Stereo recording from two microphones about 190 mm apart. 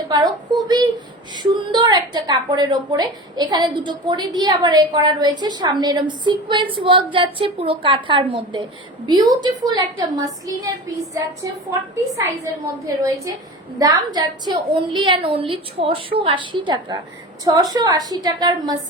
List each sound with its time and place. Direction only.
0.1 s a woman's voice: 20° right (ahead or behind)
10.4 s a sound: 15° right (ahead or behind)
13.7 s a woman's voice: 20° right (ahead or behind)